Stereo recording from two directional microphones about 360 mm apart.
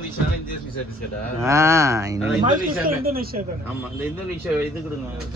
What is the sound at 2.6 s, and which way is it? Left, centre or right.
Speech, right.